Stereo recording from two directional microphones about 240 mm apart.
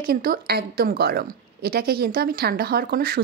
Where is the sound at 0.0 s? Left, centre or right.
Right.